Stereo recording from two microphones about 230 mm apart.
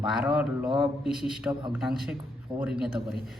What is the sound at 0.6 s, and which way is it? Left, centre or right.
Speech, right.